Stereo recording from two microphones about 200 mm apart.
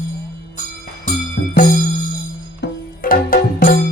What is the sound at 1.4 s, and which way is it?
Music, 55° left (ahead or behind).